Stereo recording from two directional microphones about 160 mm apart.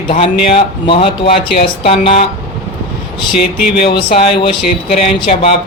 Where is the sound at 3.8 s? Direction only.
30° left (ahead or behind).